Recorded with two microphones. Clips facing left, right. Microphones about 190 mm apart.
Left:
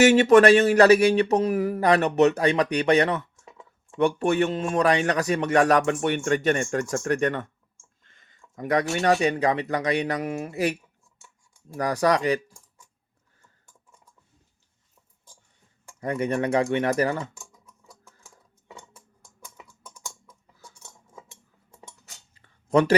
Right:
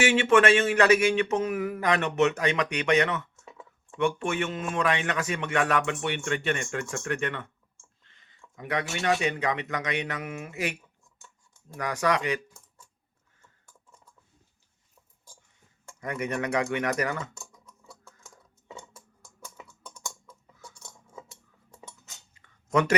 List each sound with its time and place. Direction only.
0.0 s speech: 40° left (ahead or behind)
11.8 s speech: 35° left (ahead or behind)
16.0 s speech: 30° left (ahead or behind)
17.5 s typing: 10° left (ahead or behind)
19.6 s typing: 15° left (ahead or behind)
20.7 s cutlery: 10° left (ahead or behind)
22.4 s a sound: 30° left (ahead or behind)